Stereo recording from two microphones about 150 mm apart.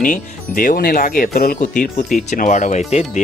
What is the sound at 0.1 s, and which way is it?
Speech, 60° left (ahead or behind).